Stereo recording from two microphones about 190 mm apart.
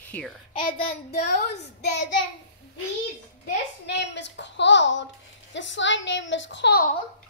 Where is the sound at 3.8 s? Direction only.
65° left (ahead or behind).